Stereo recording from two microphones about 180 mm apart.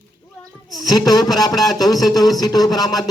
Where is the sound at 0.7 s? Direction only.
20° left (ahead or behind).